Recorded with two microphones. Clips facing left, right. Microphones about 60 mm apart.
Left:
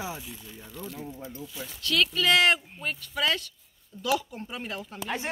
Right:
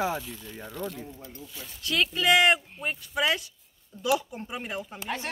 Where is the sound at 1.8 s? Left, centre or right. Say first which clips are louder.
Even; right.